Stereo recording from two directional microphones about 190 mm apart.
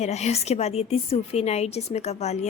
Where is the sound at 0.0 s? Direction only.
35° left (ahead or behind).